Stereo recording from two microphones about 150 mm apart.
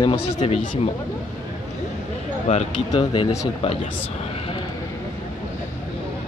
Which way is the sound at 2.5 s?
50° left (ahead or behind).